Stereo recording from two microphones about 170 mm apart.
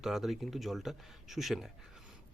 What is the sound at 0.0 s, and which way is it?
A man's voice, centre (ahead or behind).